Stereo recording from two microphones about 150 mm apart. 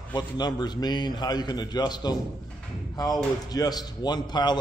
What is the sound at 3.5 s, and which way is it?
A man's voice, 25° left (ahead or behind).